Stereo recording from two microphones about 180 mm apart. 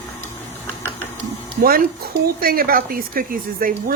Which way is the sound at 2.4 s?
55° right (ahead or behind).